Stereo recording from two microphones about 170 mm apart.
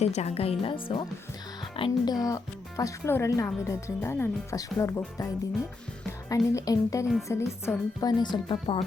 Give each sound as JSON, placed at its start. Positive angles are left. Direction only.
{"t": 0.0, "sound": "speech", "side_deg": 40}
{"t": 2.2, "sound": "speech", "side_deg": 20}
{"t": 8.2, "sound": "speech", "side_deg": 30}